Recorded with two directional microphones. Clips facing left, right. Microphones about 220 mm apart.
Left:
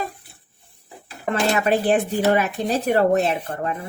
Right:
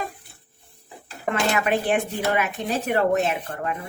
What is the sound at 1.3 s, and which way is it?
Speech, 35° left (ahead or behind).